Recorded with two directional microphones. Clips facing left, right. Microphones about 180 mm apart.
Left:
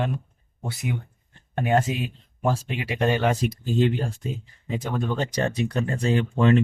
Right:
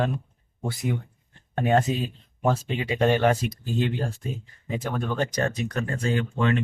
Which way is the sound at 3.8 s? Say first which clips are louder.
Left 4 dB; 20° left (ahead or behind).